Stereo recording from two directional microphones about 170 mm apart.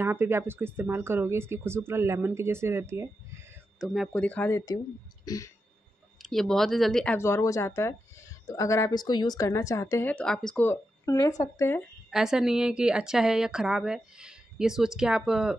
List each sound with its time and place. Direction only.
0.0 s speech: 15° right (ahead or behind)
3.8 s a woman's voice: centre (ahead or behind)
4.1 s speech: 10° left (ahead or behind)
5.2 s a sound: 20° left (ahead or behind)
6.2 s a woman's voice: 5° left (ahead or behind)
7.2 s speech: 15° left (ahead or behind)
12.1 s a woman's voice: 5° right (ahead or behind)